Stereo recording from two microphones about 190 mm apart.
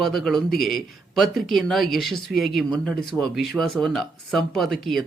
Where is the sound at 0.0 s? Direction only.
Centre (ahead or behind).